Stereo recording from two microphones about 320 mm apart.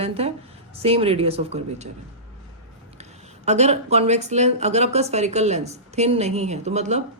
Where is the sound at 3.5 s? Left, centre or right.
Right.